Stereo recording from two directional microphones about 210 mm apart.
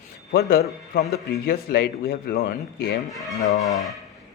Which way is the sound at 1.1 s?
50° left (ahead or behind).